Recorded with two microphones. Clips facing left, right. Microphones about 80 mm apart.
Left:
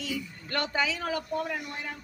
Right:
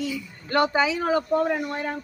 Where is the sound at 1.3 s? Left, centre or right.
Right.